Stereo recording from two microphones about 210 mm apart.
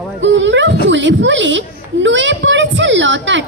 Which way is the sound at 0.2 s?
60° right (ahead or behind).